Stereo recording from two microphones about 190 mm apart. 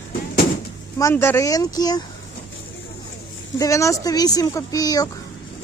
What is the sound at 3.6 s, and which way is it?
Speech, 15° left (ahead or behind).